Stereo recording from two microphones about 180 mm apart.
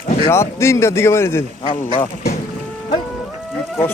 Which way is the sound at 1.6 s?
30° left (ahead or behind).